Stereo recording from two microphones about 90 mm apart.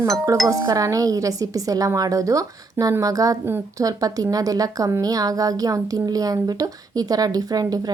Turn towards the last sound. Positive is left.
turn(degrees=-45)  # may be behind; listen again after turning